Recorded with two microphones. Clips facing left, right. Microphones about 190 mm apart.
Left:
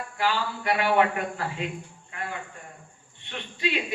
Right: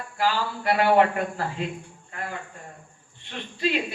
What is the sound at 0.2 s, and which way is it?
A man's voice, 40° right (ahead or behind).